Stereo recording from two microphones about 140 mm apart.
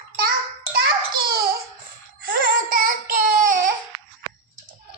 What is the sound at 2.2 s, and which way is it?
Baby cry, 90° right.